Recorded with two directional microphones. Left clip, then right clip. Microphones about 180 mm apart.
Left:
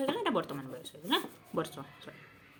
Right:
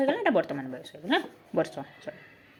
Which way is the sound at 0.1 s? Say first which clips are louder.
Right 7 dB; 20° right (ahead or behind).